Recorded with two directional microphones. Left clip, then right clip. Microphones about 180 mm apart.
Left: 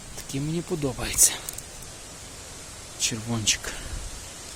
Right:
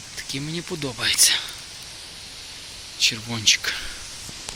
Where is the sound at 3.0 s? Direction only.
Centre (ahead or behind).